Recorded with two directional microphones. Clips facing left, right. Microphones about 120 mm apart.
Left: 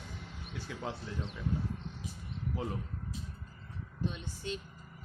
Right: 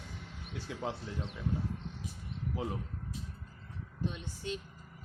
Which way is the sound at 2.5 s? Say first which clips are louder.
Even; 10° right (ahead or behind).